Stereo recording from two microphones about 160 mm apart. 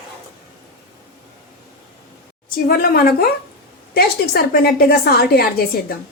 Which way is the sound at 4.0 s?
80° left.